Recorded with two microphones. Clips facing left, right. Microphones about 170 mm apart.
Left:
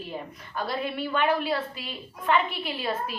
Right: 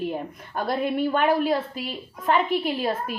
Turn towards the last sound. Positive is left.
turn(degrees=-45)  # may be behind; listen again after turning